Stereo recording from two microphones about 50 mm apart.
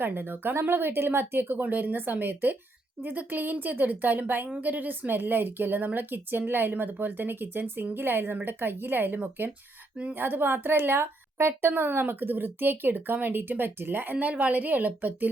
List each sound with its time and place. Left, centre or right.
0.0 s a woman's voice: right
14.2 s a woman's voice: right